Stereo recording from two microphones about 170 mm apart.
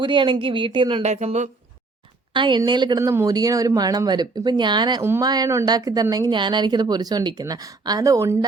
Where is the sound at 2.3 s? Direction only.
25° right (ahead or behind).